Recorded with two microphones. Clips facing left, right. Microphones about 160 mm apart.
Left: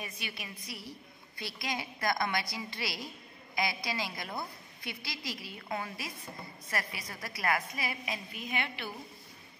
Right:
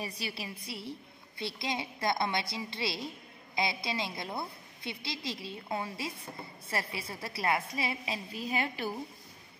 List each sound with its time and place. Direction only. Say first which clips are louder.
0.0 s a woman's voice: right 4 dB; 35° right (ahead or behind)